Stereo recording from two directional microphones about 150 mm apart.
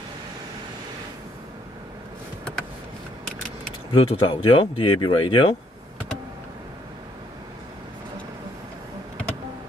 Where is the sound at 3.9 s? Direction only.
40° left (ahead or behind).